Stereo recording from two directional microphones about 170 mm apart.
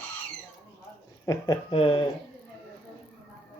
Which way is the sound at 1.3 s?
25° left (ahead or behind).